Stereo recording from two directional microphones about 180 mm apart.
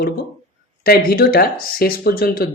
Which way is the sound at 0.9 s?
55° left (ahead or behind).